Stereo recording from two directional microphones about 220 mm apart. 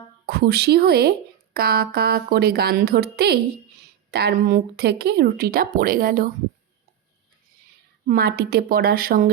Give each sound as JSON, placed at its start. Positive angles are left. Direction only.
{"t": 0.3, "sound": "speech", "side_deg": -45}
{"t": 8.0, "sound": "speech", "side_deg": -45}